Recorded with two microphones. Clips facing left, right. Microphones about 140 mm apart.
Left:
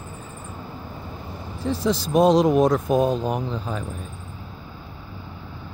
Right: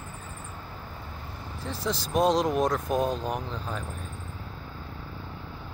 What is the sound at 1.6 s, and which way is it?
Speech, centre (ahead or behind).